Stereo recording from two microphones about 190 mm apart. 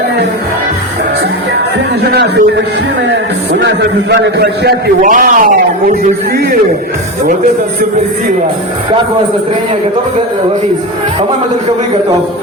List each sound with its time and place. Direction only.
2.1 s a man's voice: 65° right (ahead or behind); by 5.5 s 45° right (ahead or behind)